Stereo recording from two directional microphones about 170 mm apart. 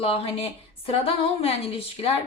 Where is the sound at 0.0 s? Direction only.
35° left (ahead or behind).